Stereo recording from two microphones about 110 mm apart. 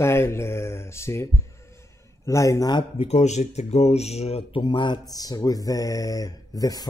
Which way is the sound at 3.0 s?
90° left.